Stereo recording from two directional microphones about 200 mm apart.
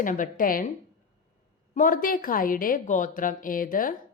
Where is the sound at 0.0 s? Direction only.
40° left (ahead or behind).